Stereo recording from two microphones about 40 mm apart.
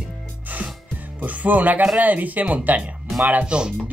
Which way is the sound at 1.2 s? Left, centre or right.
Right.